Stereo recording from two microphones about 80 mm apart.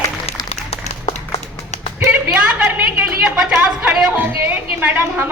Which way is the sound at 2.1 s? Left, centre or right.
Centre.